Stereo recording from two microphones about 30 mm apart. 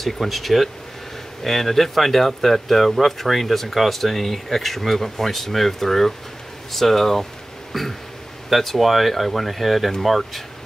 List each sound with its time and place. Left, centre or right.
0.0 s speech: centre